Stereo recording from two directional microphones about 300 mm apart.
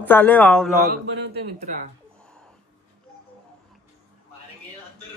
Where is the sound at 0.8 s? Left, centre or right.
Right.